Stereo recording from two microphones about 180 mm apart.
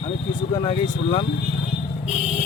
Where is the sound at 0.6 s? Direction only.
35° left (ahead or behind).